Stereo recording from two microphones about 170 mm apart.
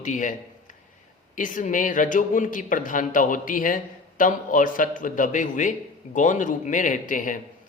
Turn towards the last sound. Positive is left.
turn(degrees=50)  # may be behind; listen again after turning